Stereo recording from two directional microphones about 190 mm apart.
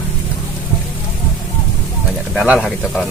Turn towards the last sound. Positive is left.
turn(degrees=0)  # may be behind; listen again after turning